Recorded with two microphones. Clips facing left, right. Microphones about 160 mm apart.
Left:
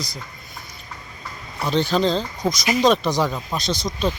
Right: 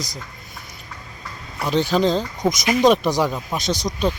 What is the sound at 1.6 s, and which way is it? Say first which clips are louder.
Speech: right 1 dB; 15° right (ahead or behind).